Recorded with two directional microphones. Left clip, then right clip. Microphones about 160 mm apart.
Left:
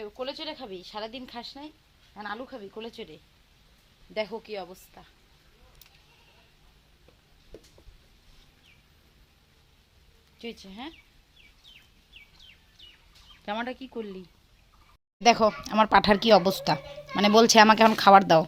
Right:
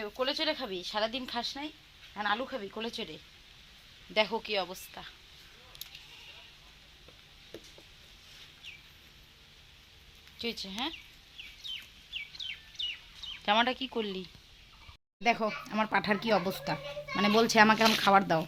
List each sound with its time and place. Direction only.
0.0 s speech: 25° right (ahead or behind)
4.4 s a woman's voice: 10° right (ahead or behind)
10.3 s speech: 15° right (ahead or behind)
13.4 s speech: centre (ahead or behind)
15.2 s speech: 35° left (ahead or behind)